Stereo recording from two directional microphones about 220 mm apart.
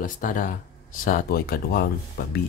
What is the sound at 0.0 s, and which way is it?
Speech, 35° left (ahead or behind).